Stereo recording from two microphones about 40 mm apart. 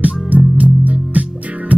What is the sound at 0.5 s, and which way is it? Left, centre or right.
Music, right.